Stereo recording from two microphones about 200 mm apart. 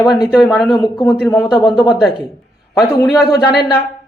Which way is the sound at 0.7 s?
20° left (ahead or behind).